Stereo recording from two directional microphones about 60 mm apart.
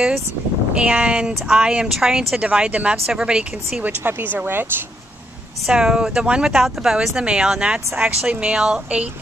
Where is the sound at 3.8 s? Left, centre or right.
Right.